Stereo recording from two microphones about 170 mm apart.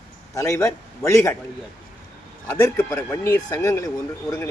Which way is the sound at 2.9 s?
20° left (ahead or behind).